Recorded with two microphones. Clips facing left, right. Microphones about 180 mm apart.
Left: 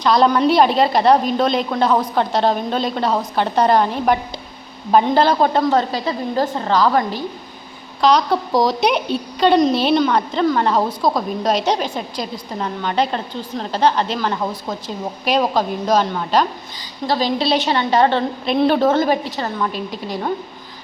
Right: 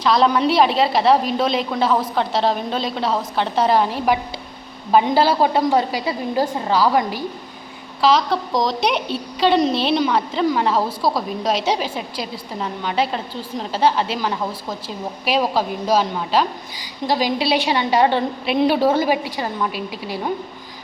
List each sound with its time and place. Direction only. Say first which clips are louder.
0.0 s a woman's voice: left 2 dB; centre (ahead or behind)
8.0 s a woman's voice: left 2 dB; centre (ahead or behind)